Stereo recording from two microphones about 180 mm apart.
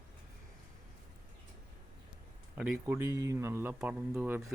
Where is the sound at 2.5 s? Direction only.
15° right (ahead or behind).